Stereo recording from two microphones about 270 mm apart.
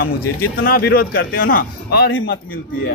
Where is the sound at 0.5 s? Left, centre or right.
Left.